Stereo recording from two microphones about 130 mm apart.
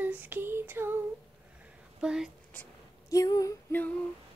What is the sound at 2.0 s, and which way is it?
Female singing, 5° right (ahead or behind).